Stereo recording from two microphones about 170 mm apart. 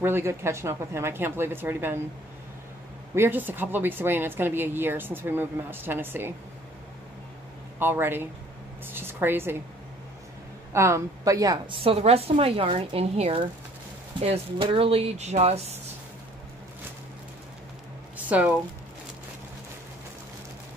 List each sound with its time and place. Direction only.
0.0 s speech: 15° right (ahead or behind)
3.2 s speech: 10° right (ahead or behind)
7.8 s speech: 10° right (ahead or behind)
10.7 s a woman's voice: 15° right (ahead or behind); by 15.8 s 40° right (ahead or behind)
18.1 s a sound: 10° right (ahead or behind)